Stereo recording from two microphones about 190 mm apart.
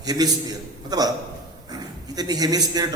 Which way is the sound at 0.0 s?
20° right (ahead or behind).